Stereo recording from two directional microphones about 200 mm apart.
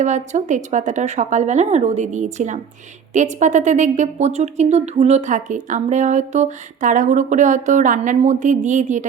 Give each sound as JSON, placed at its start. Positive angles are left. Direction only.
{"t": 0.0, "sound": "a woman's voice", "side_deg": -35}